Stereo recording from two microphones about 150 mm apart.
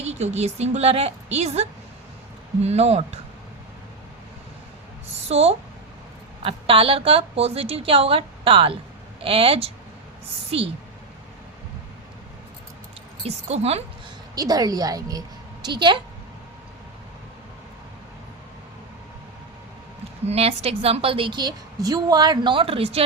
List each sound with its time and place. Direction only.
0.0 s a woman's voice: 45° right (ahead or behind)
5.3 s a woman's voice: 45° right (ahead or behind)
13.2 s a woman's voice: 45° right (ahead or behind)
14.3 s a woman's voice: 25° right (ahead or behind)
20.2 s a woman's voice: 45° right (ahead or behind)